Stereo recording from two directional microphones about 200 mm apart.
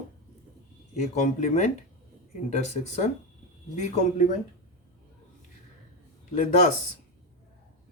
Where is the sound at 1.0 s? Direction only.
35° left (ahead or behind).